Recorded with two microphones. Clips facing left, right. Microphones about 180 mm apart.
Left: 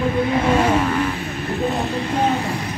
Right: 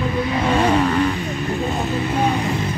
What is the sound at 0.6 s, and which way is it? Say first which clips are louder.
Vehicle: right 1 dB; 5° left (ahead or behind).